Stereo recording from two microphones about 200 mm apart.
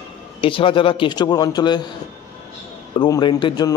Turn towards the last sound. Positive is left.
turn(degrees=20)  # may be behind; listen again after turning